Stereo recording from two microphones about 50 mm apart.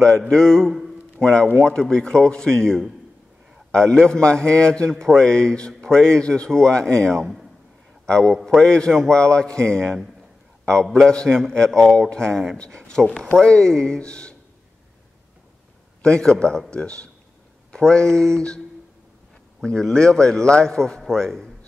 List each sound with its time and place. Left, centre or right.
0.3 s a man's voice: centre
16.0 s a man's voice: centre
19.6 s a man's voice: centre